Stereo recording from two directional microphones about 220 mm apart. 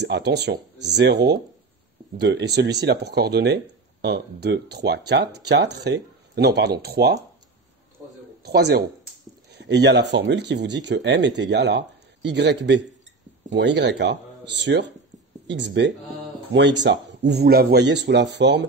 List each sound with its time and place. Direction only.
0.0 s speech: 50° right (ahead or behind)
8.4 s a man's voice: 45° right (ahead or behind)